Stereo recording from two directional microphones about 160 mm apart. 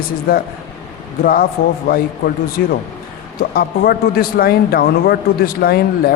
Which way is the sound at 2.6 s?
75° left (ahead or behind).